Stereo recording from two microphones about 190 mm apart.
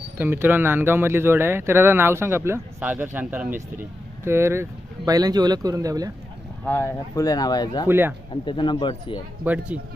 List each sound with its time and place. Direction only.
0.2 s speech: 10° right (ahead or behind)
6.7 s speech: 10° left (ahead or behind)
7.9 s speech: 10° right (ahead or behind)
8.3 s speech: 25° left (ahead or behind)
9.4 s speech: 10° right (ahead or behind)